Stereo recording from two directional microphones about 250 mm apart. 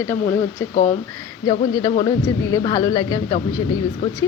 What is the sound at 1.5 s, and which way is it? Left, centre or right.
Speech, centre.